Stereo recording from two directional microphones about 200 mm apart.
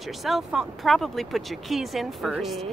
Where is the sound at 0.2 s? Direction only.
Centre (ahead or behind).